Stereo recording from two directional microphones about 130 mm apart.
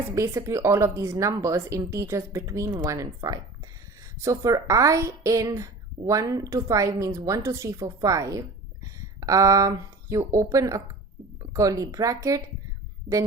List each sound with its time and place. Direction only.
0.1 s speech: 20° right (ahead or behind)